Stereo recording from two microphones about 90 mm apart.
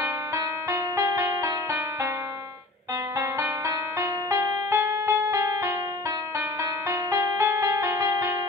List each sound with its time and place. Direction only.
0.7 s music: 40° right (ahead or behind)
3.6 s music: 40° right (ahead or behind)